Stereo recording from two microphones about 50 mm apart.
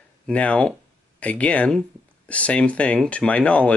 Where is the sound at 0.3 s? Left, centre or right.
Left.